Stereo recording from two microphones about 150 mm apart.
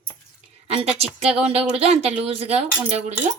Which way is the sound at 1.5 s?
40° right (ahead or behind).